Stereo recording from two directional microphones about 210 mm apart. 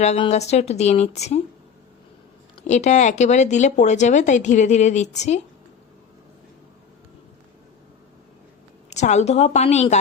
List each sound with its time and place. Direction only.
0.0 s speech: 30° left (ahead or behind)
2.6 s speech: 35° left (ahead or behind)
8.9 s speech: 35° left (ahead or behind)